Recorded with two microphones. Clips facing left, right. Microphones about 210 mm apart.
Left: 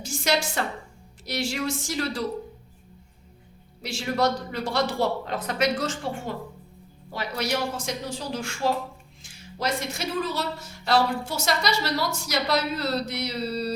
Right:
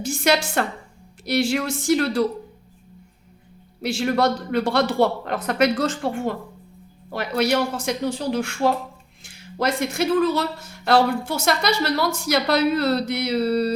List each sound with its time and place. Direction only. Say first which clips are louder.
0.0 s a woman's voice: right 5 dB; 60° right (ahead or behind)
3.8 s speech: right 5 dB; 60° right (ahead or behind)